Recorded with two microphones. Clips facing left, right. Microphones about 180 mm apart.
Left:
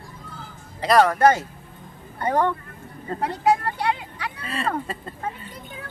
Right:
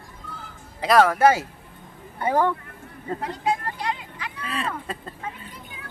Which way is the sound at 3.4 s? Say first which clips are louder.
Left 6 dB; 70° left (ahead or behind).